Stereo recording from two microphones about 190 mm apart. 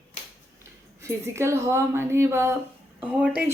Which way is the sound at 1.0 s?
15° right (ahead or behind).